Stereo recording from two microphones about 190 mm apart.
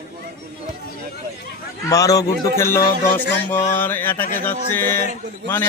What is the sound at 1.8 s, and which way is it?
Speech, 20° left (ahead or behind).